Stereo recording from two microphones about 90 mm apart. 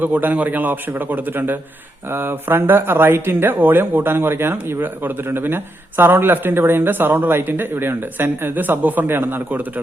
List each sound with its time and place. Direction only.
0.0 s speech: 20° right (ahead or behind)